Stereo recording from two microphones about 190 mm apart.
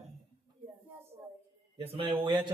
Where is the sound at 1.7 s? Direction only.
30° right (ahead or behind).